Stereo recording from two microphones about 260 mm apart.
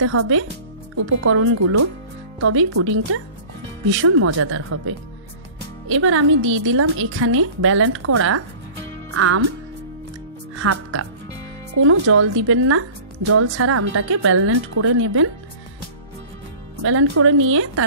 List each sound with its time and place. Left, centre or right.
0.0 s a woman's voice: right
10.6 s speech: right
16.8 s a woman's voice: right